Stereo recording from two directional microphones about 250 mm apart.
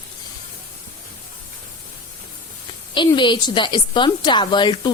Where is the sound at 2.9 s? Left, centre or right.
Centre.